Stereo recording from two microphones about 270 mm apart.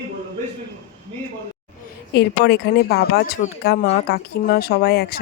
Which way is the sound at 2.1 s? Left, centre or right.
Left.